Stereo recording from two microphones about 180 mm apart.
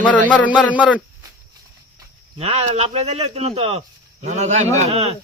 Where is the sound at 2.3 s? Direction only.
35° right (ahead or behind).